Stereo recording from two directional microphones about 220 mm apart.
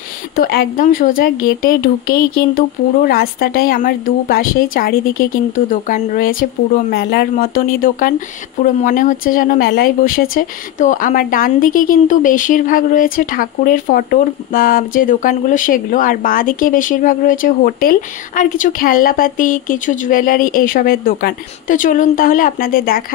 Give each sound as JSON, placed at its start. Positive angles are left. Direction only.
{"t": 0.4, "sound": "speech", "side_deg": 40}